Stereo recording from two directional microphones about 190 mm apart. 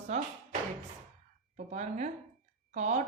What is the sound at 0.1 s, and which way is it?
Speech, 35° right (ahead or behind).